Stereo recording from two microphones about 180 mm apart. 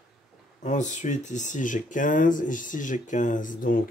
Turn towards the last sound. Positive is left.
turn(degrees=45)  # may be behind; listen again after turning